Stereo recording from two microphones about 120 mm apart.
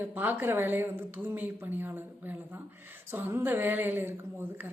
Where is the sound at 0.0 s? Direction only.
15° right (ahead or behind).